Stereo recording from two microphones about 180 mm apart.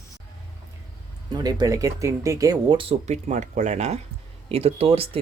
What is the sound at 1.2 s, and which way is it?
Speech, 25° right (ahead or behind).